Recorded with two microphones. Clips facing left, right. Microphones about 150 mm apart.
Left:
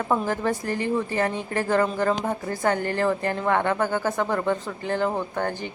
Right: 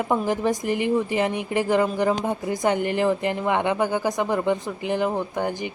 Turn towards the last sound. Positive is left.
turn(degrees=-15)  # may be behind; listen again after turning